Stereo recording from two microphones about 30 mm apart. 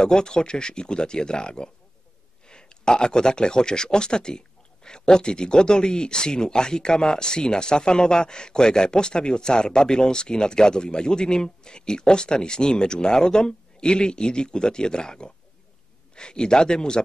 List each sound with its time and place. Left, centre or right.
0.0 s speech: left